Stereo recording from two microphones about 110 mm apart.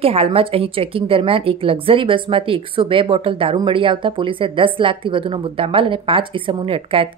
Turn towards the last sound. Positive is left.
turn(degrees=-55)  # may be behind; listen again after turning